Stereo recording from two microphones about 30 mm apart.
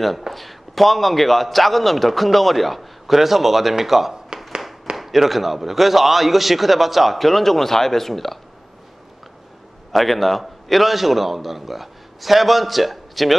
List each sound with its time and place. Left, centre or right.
0.3 s a man's voice: centre
4.3 s a sound: right
4.9 s a man's voice: centre
9.9 s a man's voice: centre